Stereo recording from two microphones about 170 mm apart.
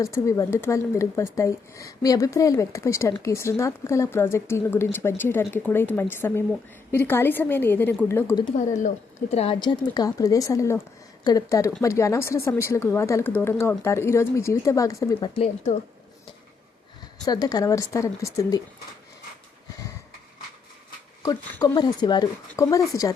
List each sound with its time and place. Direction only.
0.0 s speech: 20° left (ahead or behind)
9.3 s speech: 35° left (ahead or behind)
15.4 s speech: 45° left (ahead or behind)
17.2 s speech: 20° left (ahead or behind)
21.2 s speech: 25° left (ahead or behind)